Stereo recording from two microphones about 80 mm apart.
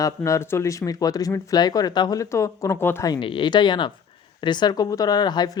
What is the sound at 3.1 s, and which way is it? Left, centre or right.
Speech, left.